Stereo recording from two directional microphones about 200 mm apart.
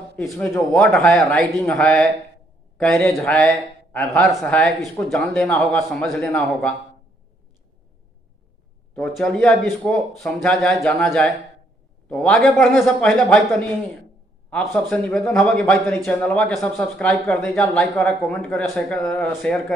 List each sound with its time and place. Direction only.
0.1 s a man's voice: 5° left (ahead or behind)
8.9 s a man's voice: 5° left (ahead or behind)
14.5 s a man's voice: centre (ahead or behind)